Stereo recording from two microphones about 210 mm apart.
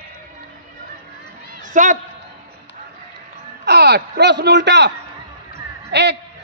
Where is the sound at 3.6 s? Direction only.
50° right (ahead or behind).